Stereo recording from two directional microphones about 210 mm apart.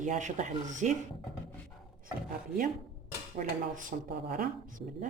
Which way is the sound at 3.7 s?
40° right (ahead or behind).